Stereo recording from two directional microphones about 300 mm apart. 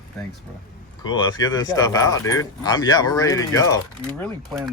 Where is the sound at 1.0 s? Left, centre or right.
Centre.